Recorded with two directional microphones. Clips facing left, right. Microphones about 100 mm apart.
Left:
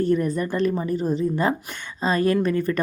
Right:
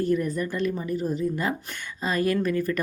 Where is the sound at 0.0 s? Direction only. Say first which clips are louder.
Left 3 dB; 35° left (ahead or behind).